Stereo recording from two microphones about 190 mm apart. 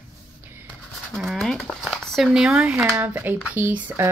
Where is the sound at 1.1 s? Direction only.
Centre (ahead or behind).